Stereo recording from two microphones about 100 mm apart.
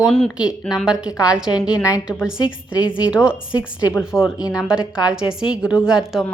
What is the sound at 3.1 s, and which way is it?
A woman's voice, 10° right (ahead or behind).